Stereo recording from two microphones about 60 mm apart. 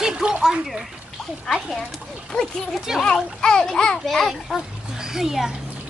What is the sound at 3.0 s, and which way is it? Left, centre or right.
A child's voice, centre.